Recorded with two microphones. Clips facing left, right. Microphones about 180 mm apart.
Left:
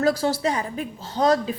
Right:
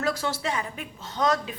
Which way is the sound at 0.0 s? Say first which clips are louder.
Left 7 dB; 35° left (ahead or behind).